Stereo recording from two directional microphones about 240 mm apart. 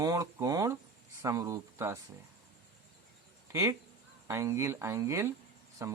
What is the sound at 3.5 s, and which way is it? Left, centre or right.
Speech, centre.